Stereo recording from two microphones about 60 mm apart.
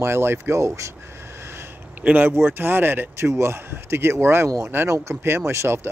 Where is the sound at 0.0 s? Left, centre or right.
Right.